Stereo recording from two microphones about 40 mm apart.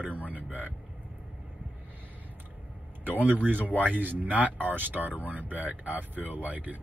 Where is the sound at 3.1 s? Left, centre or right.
Right.